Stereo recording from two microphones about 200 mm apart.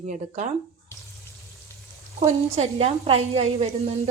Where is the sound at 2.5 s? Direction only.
30° right (ahead or behind).